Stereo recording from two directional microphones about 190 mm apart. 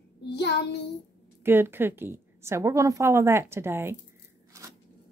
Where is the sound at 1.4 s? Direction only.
10° right (ahead or behind).